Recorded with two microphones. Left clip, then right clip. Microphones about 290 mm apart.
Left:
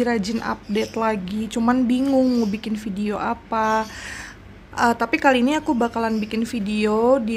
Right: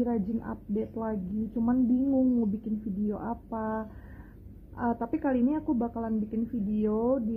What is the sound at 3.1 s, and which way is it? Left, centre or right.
A woman's voice, centre.